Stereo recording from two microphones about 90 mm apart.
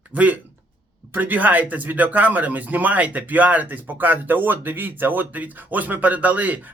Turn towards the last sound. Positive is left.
turn(degrees=-20)  # may be behind; listen again after turning